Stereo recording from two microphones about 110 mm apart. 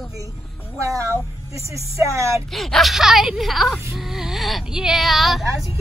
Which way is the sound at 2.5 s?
Centre (ahead or behind).